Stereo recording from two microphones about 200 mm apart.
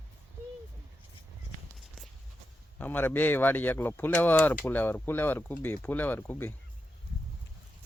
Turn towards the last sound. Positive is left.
turn(degrees=10)  # may be behind; listen again after turning